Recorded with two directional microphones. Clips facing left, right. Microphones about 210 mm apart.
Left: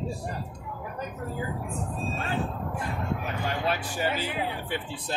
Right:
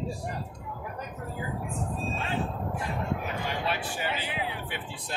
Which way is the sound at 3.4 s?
45° left (ahead or behind).